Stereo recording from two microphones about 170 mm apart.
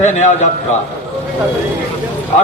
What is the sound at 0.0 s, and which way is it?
Speech, 45° left (ahead or behind).